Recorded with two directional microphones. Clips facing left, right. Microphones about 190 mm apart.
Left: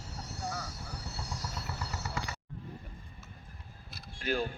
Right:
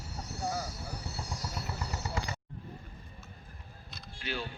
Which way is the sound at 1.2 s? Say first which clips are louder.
Even; 10° right (ahead or behind).